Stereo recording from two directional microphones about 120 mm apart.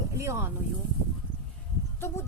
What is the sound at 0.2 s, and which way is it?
Speech, 20° right (ahead or behind).